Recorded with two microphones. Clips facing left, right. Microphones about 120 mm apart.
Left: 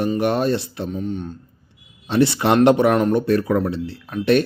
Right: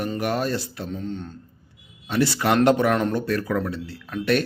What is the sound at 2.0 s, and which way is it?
Speech, 25° left (ahead or behind).